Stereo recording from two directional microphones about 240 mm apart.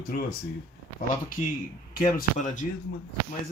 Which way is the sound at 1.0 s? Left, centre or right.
Left.